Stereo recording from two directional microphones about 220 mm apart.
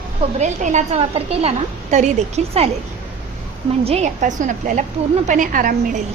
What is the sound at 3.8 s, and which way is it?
A woman's voice, 30° right (ahead or behind).